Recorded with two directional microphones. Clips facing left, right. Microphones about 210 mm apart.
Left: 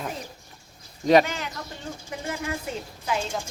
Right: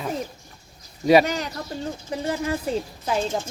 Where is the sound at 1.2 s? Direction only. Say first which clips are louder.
Right 6 dB; 40° right (ahead or behind).